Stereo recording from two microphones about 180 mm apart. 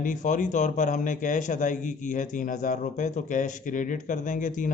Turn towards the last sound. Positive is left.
turn(degrees=45)  # may be behind; listen again after turning